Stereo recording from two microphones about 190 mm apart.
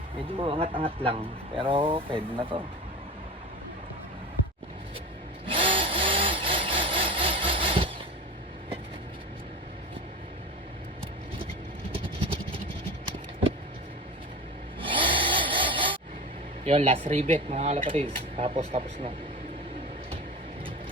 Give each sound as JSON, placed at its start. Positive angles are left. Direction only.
{"t": 0.2, "sound": "speech", "side_deg": -30}
{"t": 5.5, "sound": "tools", "side_deg": -25}
{"t": 11.9, "sound": "vehicle", "side_deg": -30}
{"t": 14.8, "sound": "a sound", "side_deg": -25}
{"t": 16.6, "sound": "speech", "side_deg": -30}